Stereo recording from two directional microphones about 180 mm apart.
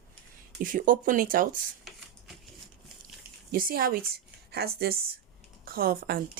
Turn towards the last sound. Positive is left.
turn(degrees=-55)  # may be behind; listen again after turning